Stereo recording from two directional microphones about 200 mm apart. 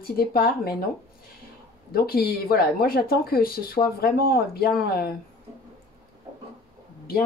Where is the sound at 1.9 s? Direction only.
50° left (ahead or behind).